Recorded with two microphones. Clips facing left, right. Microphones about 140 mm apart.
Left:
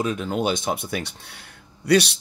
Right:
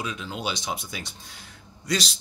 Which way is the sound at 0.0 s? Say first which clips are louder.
Left 8 dB; 50° left (ahead or behind).